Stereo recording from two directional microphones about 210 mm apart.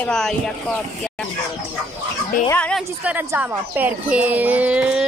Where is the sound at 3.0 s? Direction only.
10° right (ahead or behind).